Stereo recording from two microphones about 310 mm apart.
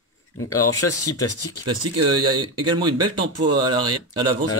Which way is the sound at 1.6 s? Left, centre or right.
Centre.